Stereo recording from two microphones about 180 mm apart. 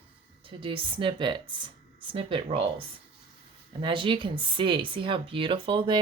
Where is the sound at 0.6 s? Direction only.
30° right (ahead or behind).